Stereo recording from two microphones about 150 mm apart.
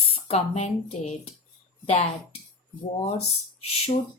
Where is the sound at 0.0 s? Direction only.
45° left (ahead or behind).